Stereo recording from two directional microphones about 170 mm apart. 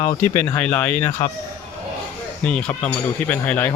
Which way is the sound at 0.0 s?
15° left (ahead or behind).